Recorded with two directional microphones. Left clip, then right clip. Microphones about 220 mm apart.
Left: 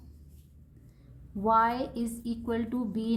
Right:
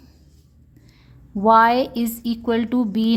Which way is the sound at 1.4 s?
35° right (ahead or behind).